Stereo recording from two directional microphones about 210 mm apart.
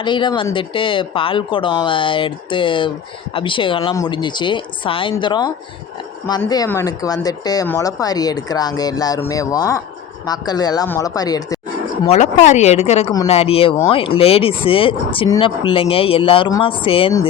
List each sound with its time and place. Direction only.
0.0 s a woman's voice: 25° left (ahead or behind)
12.0 s speech: 35° left (ahead or behind)